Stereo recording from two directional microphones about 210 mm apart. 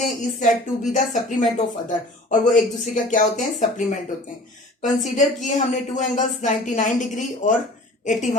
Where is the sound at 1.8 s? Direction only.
35° left (ahead or behind).